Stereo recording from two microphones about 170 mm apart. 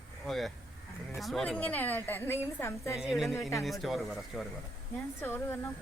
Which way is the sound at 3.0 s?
Centre (ahead or behind).